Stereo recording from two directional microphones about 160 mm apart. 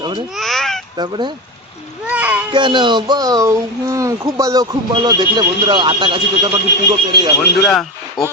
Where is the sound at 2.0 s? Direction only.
10° right (ahead or behind).